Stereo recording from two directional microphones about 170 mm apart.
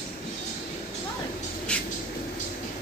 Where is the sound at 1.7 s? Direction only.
5° left (ahead or behind).